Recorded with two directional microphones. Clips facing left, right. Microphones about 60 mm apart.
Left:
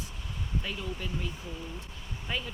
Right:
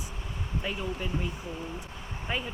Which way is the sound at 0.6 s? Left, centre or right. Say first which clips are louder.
Right 4 dB; right.